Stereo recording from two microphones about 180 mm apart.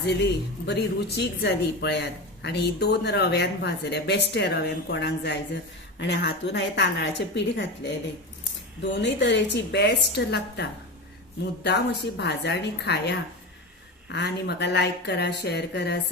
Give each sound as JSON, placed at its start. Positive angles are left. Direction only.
{"t": 0.0, "sound": "speech", "side_deg": 70}